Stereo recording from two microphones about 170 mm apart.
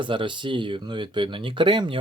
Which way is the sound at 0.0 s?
30° right (ahead or behind).